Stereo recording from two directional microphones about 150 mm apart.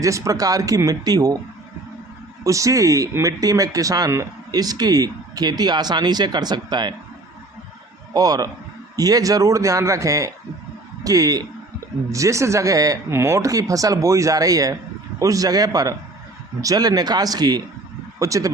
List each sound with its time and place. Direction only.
0.0 s speech: 20° right (ahead or behind)
2.4 s speech: 20° right (ahead or behind)
8.1 s speech: 25° right (ahead or behind)